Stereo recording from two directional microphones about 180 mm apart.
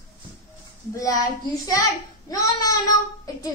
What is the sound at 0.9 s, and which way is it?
Speech, 20° left (ahead or behind).